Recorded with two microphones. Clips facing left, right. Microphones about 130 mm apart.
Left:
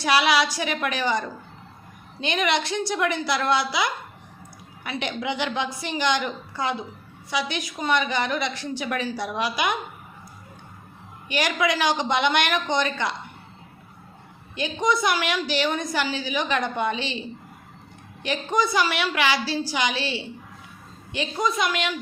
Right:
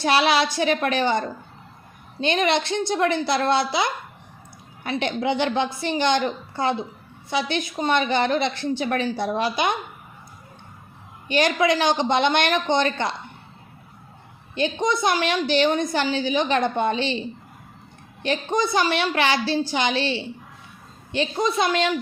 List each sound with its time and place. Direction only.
0.0 s a woman's voice: 25° right (ahead or behind)
2.2 s a woman's voice: 30° right (ahead or behind)
11.3 s a woman's voice: 25° right (ahead or behind)
14.5 s a woman's voice: 25° right (ahead or behind)
18.2 s a woman's voice: 25° right (ahead or behind)